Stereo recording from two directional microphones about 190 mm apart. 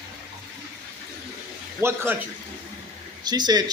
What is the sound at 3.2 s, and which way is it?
Speech, 20° right (ahead or behind).